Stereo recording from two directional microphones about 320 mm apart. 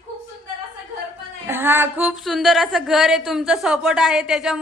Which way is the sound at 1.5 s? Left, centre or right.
Centre.